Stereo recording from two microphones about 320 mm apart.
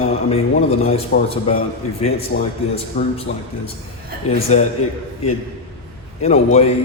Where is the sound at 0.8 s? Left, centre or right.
Centre.